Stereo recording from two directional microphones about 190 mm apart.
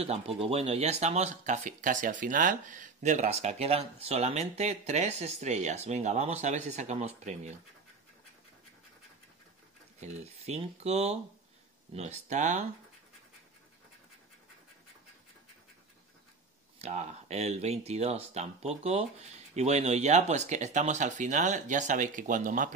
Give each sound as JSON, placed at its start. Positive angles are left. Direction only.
{"t": 0.0, "sound": "speech", "side_deg": -30}
{"t": 9.9, "sound": "speech", "side_deg": -35}
{"t": 16.7, "sound": "speech", "side_deg": -35}